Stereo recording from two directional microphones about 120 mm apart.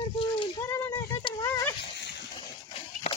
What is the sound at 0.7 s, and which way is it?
Speech, 20° left (ahead or behind).